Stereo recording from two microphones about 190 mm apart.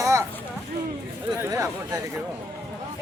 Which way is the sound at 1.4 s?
15° right (ahead or behind).